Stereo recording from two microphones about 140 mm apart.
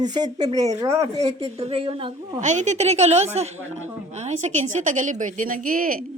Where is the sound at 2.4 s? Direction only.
60° right (ahead or behind); by 6.1 s 90° right.